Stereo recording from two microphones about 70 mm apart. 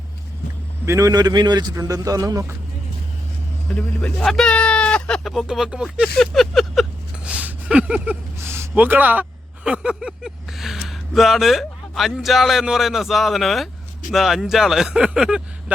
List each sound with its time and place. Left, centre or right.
0.9 s a man's voice: right
1.1 s speech: right
1.8 s speech: right
3.7 s speech: left
4.3 s speech: centre
4.5 s a sound: centre
5.2 s speech: centre
7.3 s a sound: centre
8.4 s a sound: right
8.7 s speech: right
9.6 s a sound: centre
10.0 s speech: centre